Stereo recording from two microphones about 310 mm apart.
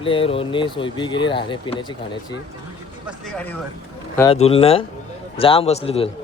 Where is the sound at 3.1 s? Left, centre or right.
Centre.